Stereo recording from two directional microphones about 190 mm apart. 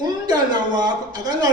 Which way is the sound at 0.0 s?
20° right (ahead or behind).